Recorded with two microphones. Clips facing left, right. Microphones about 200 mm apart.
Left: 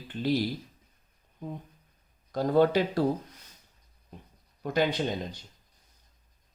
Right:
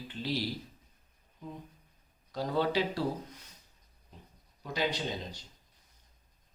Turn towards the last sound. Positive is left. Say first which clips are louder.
# left 6 dB
turn(degrees=50)  # may be behind; listen again after turning